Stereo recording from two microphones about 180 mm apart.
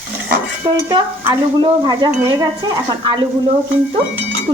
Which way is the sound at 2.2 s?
25° right (ahead or behind).